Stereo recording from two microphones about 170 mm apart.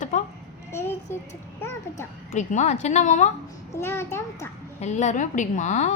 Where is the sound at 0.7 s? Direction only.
15° left (ahead or behind).